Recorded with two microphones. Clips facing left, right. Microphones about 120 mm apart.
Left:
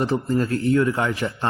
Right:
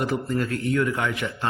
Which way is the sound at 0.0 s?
30° left (ahead or behind).